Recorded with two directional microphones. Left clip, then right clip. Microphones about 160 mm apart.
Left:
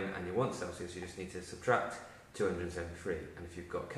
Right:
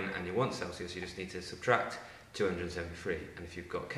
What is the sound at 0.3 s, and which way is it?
A man's voice, 15° right (ahead or behind).